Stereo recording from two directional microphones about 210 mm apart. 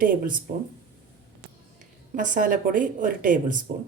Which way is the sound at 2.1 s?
40° right (ahead or behind).